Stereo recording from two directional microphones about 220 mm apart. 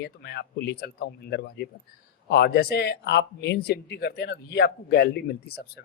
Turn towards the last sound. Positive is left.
turn(degrees=45)  # may be behind; listen again after turning